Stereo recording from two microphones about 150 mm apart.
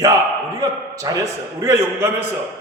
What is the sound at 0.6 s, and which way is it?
A man's voice, 25° right (ahead or behind).